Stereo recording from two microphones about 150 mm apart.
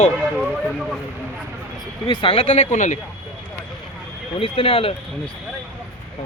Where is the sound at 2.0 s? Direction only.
40° left (ahead or behind); by 3.0 s 55° left (ahead or behind).